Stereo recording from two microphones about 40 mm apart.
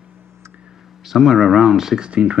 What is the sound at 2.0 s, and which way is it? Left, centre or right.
Speech, right.